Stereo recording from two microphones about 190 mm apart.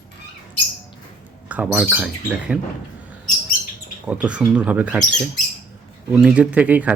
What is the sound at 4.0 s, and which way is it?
Speech, 5° right (ahead or behind).